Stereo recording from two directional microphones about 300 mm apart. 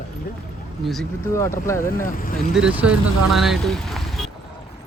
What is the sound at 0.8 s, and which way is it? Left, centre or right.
Speech, centre.